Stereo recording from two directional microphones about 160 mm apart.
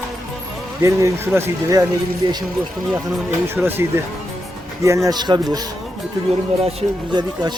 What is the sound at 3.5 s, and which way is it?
A man's voice, 15° right (ahead or behind).